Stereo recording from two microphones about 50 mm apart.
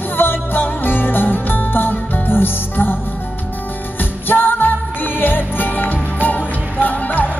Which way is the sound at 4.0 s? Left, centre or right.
Left.